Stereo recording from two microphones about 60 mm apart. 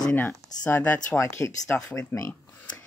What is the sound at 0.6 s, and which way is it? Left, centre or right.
Speech, left.